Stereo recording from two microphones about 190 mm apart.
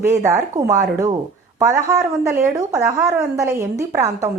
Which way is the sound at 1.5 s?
15° right (ahead or behind).